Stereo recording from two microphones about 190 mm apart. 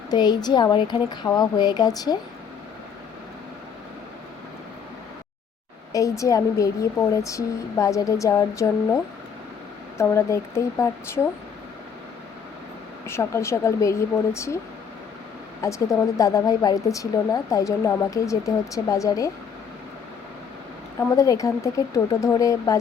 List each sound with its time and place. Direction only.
0.1 s speech: 20° left (ahead or behind)
5.9 s a woman's voice: 15° left (ahead or behind)
10.0 s a woman's voice: 15° left (ahead or behind)
13.1 s a woman's voice: 15° left (ahead or behind)
15.6 s a woman's voice: 20° left (ahead or behind)
21.2 s a woman's voice: 15° left (ahead or behind)